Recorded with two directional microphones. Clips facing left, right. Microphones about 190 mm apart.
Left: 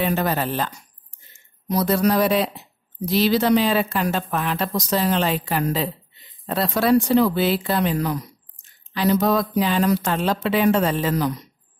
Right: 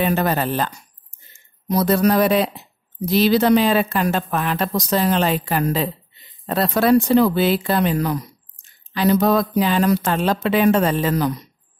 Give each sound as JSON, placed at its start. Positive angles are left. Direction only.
{"t": 0.0, "sound": "speech", "side_deg": -55}
{"t": 1.7, "sound": "speech", "side_deg": -50}